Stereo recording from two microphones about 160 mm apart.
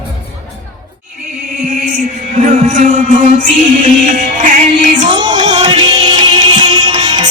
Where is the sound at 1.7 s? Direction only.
60° right (ahead or behind).